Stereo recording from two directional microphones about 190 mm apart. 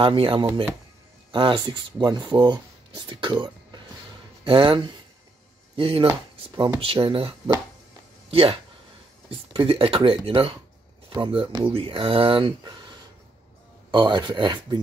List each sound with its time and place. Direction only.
0.0 s speech: 30° right (ahead or behind)
13.9 s speech: 25° right (ahead or behind)